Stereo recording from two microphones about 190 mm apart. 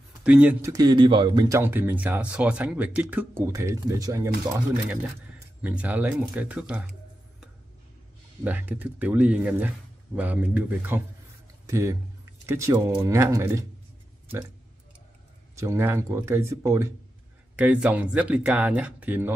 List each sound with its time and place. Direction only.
0.2 s speech: 10° right (ahead or behind)
8.5 s speech: 10° right (ahead or behind)
15.5 s speech: 15° right (ahead or behind)